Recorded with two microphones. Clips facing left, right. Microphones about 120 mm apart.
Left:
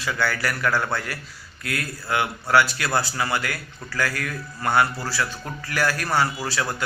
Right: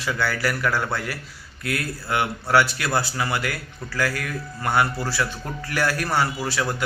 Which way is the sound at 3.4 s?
25° right (ahead or behind).